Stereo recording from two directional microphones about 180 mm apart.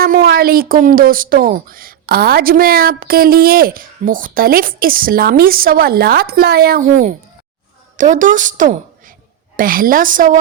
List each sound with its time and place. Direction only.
0.0 s speech: 55° right (ahead or behind)
7.9 s a woman's voice: 45° right (ahead or behind)